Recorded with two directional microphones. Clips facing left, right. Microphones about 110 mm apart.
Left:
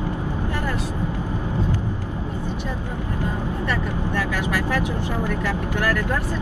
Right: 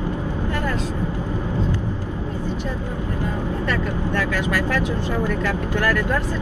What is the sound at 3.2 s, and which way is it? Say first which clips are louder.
Speech: right 1 dB; 15° left (ahead or behind).